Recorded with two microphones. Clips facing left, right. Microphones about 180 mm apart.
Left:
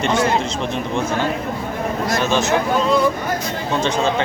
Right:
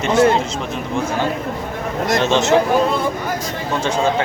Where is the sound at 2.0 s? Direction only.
25° right (ahead or behind).